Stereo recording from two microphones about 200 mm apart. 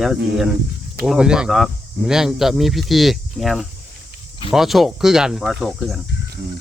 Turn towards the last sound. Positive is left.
turn(degrees=0)  # may be behind; listen again after turning